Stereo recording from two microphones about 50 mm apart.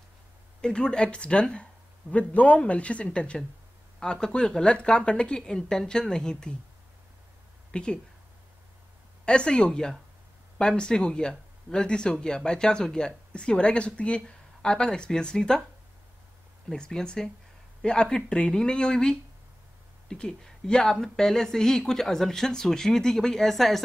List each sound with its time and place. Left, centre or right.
0.6 s speech: centre
7.7 s speech: centre
9.2 s speech: centre
16.7 s speech: centre